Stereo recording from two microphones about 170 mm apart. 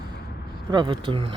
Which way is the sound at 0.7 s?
30° right (ahead or behind).